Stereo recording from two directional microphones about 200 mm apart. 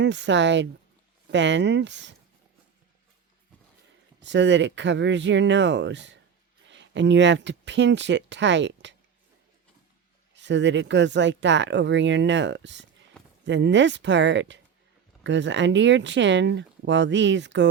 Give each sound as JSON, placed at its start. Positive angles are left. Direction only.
{"t": 0.0, "sound": "speech", "side_deg": -60}
{"t": 4.2, "sound": "speech", "side_deg": -65}
{"t": 10.3, "sound": "speech", "side_deg": -65}